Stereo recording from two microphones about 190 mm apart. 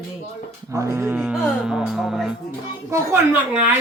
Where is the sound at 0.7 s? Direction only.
15° right (ahead or behind).